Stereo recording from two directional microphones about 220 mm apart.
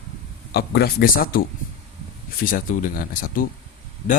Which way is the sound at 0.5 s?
45° left (ahead or behind).